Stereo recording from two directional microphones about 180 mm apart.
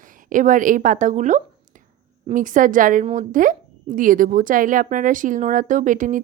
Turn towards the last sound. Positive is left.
turn(degrees=-45)  # may be behind; listen again after turning